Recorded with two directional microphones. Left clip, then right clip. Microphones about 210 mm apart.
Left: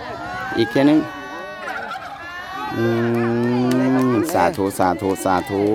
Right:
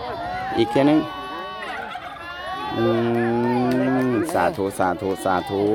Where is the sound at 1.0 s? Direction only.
55° left (ahead or behind).